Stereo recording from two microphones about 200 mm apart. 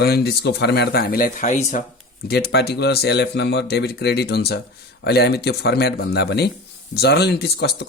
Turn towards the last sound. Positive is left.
turn(degrees=55)  # may be behind; listen again after turning